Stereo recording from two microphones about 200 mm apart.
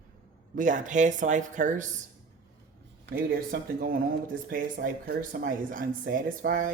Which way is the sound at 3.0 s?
45° right (ahead or behind).